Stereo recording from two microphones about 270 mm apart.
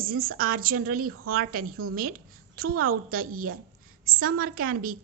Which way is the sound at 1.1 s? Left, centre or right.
Right.